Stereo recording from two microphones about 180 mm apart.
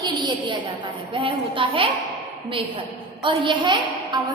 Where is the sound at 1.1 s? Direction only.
30° right (ahead or behind).